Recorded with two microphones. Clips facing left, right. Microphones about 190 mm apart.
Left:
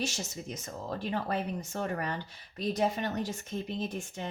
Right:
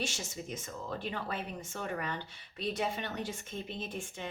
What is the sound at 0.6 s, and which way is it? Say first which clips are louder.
Speech: left 5 dB; 40° left (ahead or behind).